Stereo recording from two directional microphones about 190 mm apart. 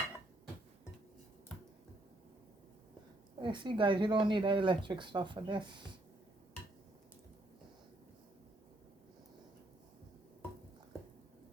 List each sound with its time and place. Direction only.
3.4 s speech: 25° right (ahead or behind)